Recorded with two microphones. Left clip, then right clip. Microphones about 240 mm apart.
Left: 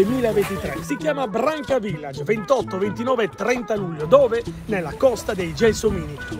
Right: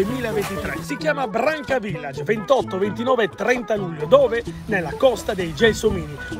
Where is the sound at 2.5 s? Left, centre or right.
Right.